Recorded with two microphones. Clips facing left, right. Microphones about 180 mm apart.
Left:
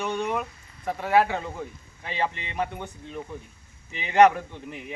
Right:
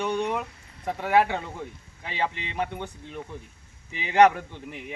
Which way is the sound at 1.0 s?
Centre (ahead or behind).